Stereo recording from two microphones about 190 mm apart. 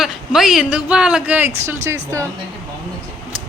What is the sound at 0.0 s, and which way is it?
Speech, centre (ahead or behind).